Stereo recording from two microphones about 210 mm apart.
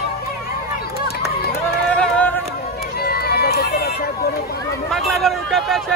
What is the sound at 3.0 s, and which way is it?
Run, 45° left (ahead or behind).